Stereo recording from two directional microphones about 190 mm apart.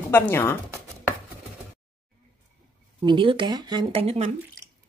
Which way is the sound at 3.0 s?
25° right (ahead or behind).